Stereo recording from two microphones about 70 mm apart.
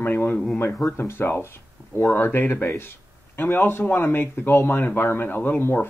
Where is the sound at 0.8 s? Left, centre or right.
Left.